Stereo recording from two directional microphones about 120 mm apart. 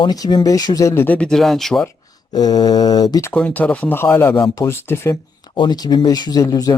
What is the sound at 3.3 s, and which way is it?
Speech, 10° left (ahead or behind).